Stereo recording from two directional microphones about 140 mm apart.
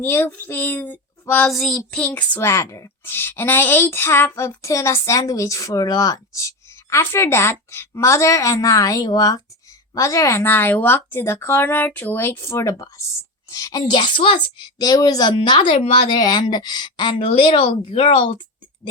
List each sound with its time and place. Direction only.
0.0 s speech: 15° left (ahead or behind)
1.5 s child singing: centre (ahead or behind)
2.0 s a woman's voice: 15° left (ahead or behind); by 18.3 s 40° left (ahead or behind)